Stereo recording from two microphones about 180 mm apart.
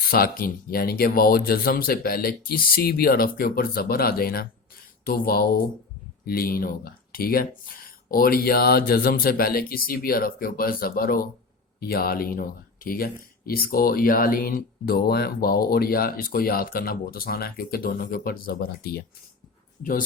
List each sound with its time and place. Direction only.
0.0 s speech: 55° left (ahead or behind)